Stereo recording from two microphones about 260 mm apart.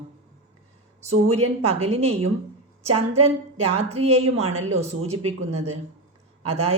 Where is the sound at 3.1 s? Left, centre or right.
Right.